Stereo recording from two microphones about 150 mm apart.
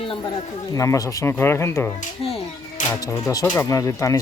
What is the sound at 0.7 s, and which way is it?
Speech, 20° left (ahead or behind).